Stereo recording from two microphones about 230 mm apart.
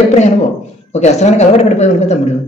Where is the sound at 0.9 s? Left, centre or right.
Left.